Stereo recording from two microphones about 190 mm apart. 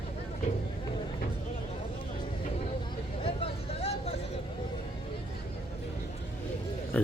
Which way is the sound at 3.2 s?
30° left (ahead or behind).